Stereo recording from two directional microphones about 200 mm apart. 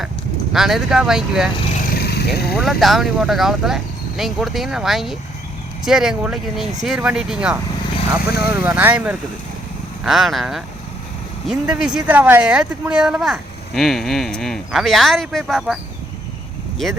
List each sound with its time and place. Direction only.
0.5 s speech: centre (ahead or behind)
2.0 s vehicle: 55° left (ahead or behind)
2.6 s speech: centre (ahead or behind)